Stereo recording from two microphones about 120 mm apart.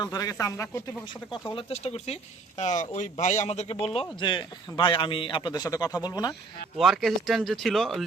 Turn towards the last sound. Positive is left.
turn(degrees=0)  # may be behind; listen again after turning